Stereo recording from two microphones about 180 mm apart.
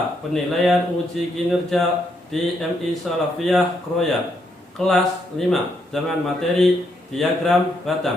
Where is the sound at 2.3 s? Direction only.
Centre (ahead or behind).